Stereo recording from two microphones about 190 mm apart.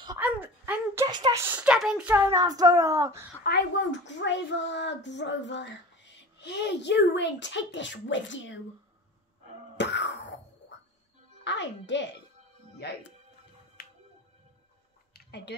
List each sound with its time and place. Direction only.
0.2 s a sound: 10° right (ahead or behind)
1.0 s speech: 20° right (ahead or behind)
3.4 s speech: 70° left (ahead or behind)
9.8 s wail: 65° left (ahead or behind)
11.4 s a child's voice: 70° left (ahead or behind)
13.8 s music: 55° left (ahead or behind)
15.1 s a sound: 60° left (ahead or behind)